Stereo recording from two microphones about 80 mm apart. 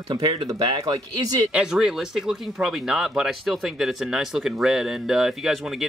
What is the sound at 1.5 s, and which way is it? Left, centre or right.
Speech, centre.